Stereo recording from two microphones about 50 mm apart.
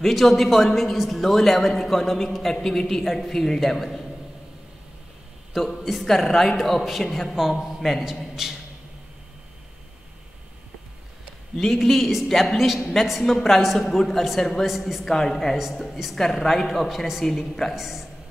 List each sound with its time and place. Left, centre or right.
0.0 s a man's voice: centre
5.5 s a man's voice: centre
11.5 s a man's voice: centre
17.7 s a man's voice: centre